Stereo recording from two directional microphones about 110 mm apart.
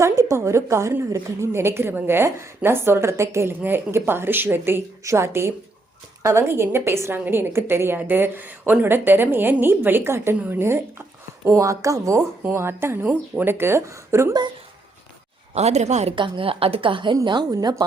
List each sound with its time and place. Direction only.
0.0 s a woman's voice: 25° right (ahead or behind)
15.5 s speech: 85° right
16.1 s a woman's voice: 50° right (ahead or behind)
17.2 s speech: 40° right (ahead or behind)